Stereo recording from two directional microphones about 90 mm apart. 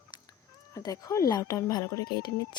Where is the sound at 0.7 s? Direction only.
40° left (ahead or behind).